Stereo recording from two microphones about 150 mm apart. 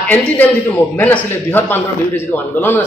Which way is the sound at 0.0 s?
10° left (ahead or behind).